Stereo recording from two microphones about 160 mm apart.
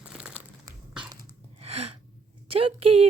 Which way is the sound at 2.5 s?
35° right (ahead or behind).